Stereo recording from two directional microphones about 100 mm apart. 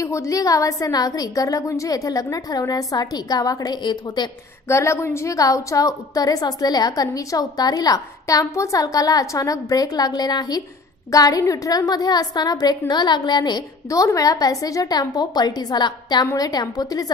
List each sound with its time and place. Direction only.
0.0 s a woman's voice: 30° left (ahead or behind); by 4.3 s 50° left (ahead or behind)
4.6 s a woman's voice: 30° left (ahead or behind); by 13.7 s 45° left (ahead or behind)
13.8 s a woman's voice: 35° left (ahead or behind)